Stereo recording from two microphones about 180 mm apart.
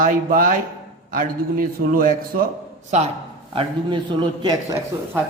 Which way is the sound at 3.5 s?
25° right (ahead or behind).